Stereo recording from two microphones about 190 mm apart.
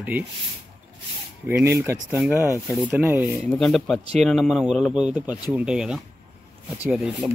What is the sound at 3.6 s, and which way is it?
Speech, centre (ahead or behind).